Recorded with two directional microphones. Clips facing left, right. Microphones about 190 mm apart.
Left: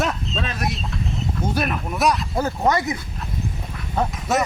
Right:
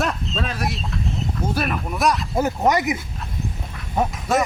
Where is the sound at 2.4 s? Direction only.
20° right (ahead or behind).